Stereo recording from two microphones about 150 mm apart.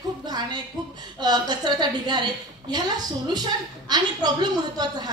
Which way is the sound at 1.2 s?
30° right (ahead or behind).